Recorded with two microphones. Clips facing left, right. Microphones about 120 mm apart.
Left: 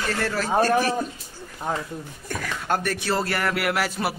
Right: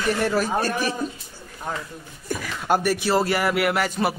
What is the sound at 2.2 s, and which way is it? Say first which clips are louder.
A man's voice: right 3 dB; 5° right (ahead or behind).